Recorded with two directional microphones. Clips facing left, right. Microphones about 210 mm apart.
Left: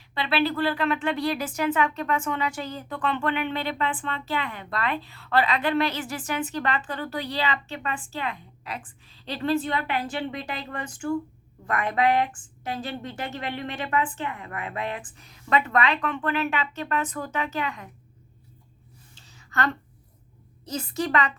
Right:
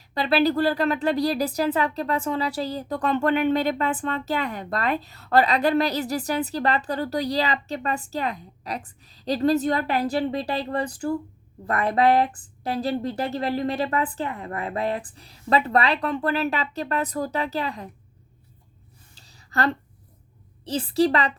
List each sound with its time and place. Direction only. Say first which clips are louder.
0.1 s a woman's voice: right 4 dB; 40° right (ahead or behind)
19.1 s a sound: right 3 dB; 35° right (ahead or behind)
20.7 s a woman's voice: right 7 dB; 30° right (ahead or behind)